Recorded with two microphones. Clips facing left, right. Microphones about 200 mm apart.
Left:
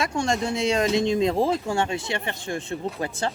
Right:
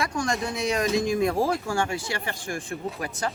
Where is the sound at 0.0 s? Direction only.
25° left (ahead or behind).